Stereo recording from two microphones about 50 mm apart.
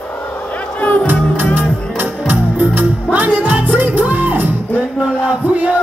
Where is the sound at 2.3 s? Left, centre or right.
Right.